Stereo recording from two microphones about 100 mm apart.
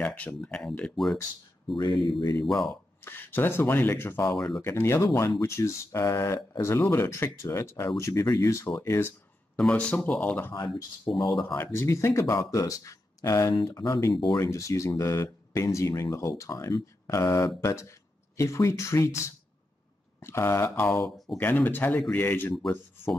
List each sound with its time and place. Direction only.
0.0 s speech: 15° left (ahead or behind)
1.8 s speech: 55° left (ahead or behind)
2.7 s speech: 20° left (ahead or behind)
4.6 s speech: 25° left (ahead or behind)
9.6 s speech: 10° left (ahead or behind)
10.5 s speech: 45° left (ahead or behind)
11.5 s speech: 25° left (ahead or behind)